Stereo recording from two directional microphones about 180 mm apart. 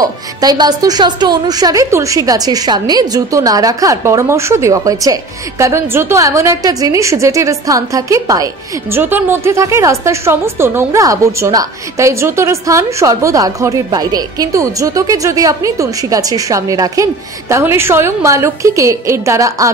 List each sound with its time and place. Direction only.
0.0 s a woman's voice: 20° right (ahead or behind)